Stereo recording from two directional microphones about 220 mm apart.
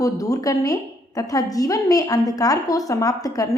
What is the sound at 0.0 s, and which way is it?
A woman's voice, 15° left (ahead or behind).